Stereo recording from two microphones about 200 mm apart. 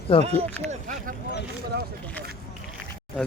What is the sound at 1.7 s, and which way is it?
Speech, 50° right (ahead or behind).